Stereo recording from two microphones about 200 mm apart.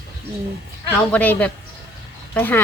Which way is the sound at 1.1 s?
5° left (ahead or behind).